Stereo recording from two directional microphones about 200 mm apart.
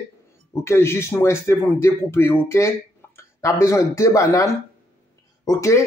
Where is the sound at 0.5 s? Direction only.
10° left (ahead or behind).